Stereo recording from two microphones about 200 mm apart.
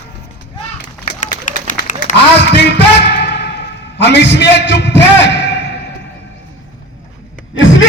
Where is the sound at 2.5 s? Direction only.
60° left (ahead or behind).